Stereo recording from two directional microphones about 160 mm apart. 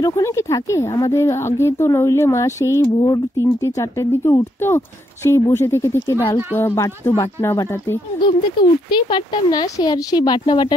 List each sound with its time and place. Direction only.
0.0 s a woman's voice: 20° left (ahead or behind)
8.9 s speech: 30° left (ahead or behind)